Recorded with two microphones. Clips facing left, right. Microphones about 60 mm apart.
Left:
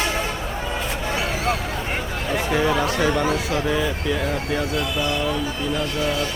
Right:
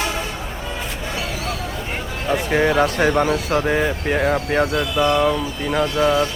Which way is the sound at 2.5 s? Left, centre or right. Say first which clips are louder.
Right 4 dB; right.